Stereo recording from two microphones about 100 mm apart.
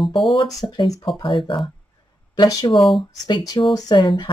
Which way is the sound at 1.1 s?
60° left (ahead or behind).